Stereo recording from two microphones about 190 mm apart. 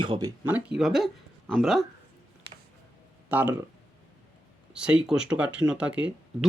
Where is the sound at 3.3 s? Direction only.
10° right (ahead or behind).